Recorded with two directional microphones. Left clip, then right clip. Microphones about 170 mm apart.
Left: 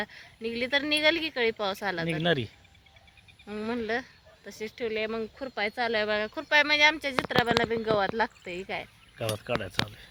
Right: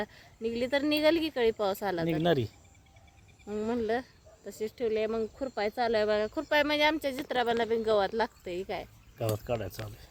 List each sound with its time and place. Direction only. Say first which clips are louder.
0.0 s speech: even; 20° right (ahead or behind)
2.0 s speech: even; centre (ahead or behind)
3.4 s speech: right 1 dB; 20° right (ahead or behind)
7.3 s speech: left 2 dB; centre (ahead or behind)
9.8 s speech: left 13 dB; 30° left (ahead or behind)